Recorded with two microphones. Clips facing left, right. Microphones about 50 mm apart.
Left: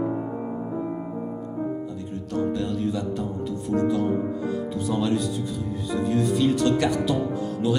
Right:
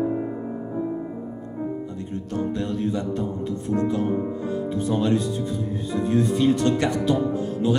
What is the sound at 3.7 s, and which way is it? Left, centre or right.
Speech, right.